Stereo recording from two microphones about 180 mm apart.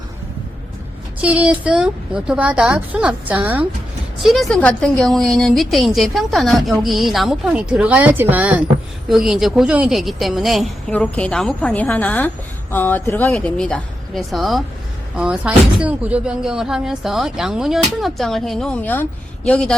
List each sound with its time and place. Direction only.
1.2 s speech: 5° right (ahead or behind)